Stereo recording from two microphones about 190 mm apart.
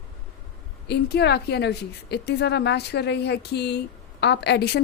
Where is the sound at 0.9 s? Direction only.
60° left (ahead or behind).